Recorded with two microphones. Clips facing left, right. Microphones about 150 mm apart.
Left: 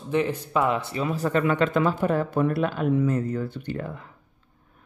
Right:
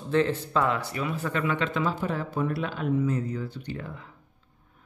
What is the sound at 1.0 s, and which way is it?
Speech, 40° left (ahead or behind).